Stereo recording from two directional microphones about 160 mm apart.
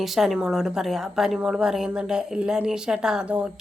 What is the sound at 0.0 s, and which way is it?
A woman's voice, centre (ahead or behind).